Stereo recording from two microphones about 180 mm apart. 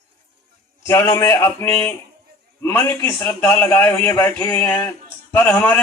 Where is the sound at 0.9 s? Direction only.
20° left (ahead or behind).